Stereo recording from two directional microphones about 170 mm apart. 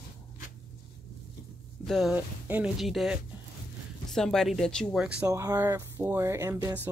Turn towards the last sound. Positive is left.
turn(degrees=-15)  # may be behind; listen again after turning